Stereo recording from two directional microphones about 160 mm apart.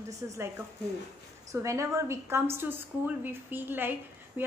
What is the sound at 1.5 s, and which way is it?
A woman's voice, 20° right (ahead or behind).